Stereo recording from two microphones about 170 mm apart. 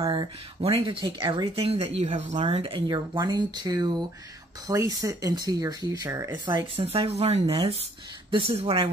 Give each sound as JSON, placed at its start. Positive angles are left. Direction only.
{"t": 0.0, "sound": "speech", "side_deg": -25}
{"t": 0.6, "sound": "speech", "side_deg": -35}
{"t": 1.0, "sound": "speech", "side_deg": -25}